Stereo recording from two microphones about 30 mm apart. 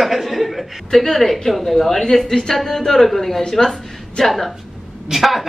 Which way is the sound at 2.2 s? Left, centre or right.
Left.